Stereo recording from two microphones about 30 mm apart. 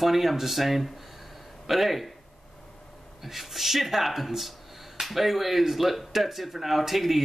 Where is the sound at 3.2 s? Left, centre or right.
Centre.